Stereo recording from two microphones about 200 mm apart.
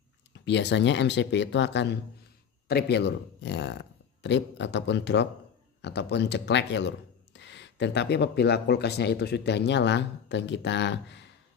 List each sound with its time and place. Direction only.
0.5 s speech: 60° left (ahead or behind)